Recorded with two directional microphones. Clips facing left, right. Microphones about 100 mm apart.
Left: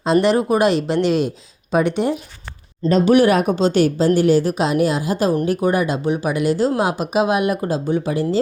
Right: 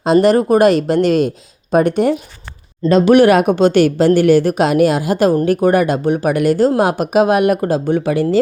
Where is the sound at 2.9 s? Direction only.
75° right (ahead or behind).